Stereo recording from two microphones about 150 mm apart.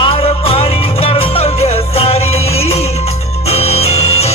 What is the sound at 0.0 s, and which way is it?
Music, 40° left (ahead or behind).